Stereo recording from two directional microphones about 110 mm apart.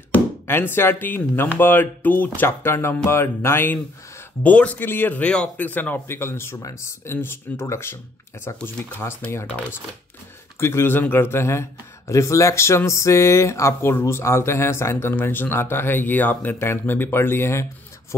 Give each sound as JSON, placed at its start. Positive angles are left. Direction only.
{"t": 0.1, "sound": "speech", "side_deg": 20}
{"t": 8.5, "sound": "speech", "side_deg": 10}
{"t": 9.0, "sound": "speech", "side_deg": 25}
{"t": 10.6, "sound": "speech", "side_deg": 25}